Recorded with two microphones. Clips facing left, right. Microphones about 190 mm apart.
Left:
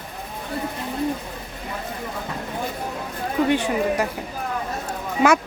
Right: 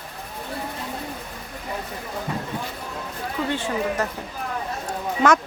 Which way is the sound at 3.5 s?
15° left (ahead or behind).